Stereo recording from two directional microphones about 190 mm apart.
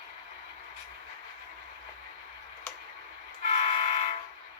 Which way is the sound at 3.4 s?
40° left (ahead or behind).